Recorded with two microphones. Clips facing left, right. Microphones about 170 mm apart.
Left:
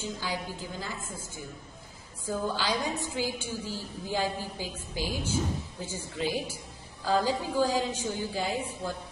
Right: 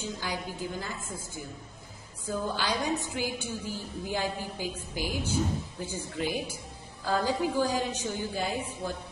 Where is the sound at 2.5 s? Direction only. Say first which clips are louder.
Right 1 dB; 20° right (ahead or behind).